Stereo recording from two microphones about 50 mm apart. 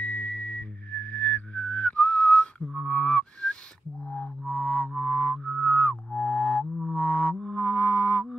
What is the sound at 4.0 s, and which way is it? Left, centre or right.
Music, centre.